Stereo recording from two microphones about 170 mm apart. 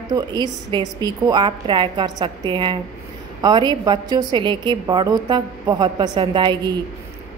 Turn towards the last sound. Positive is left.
turn(degrees=-25)  # may be behind; listen again after turning